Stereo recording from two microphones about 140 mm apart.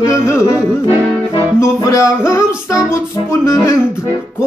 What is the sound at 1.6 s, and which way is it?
Music, 20° left (ahead or behind).